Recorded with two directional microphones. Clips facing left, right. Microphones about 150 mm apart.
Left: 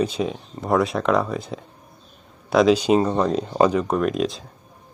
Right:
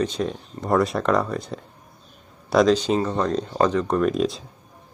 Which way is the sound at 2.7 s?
10° left (ahead or behind).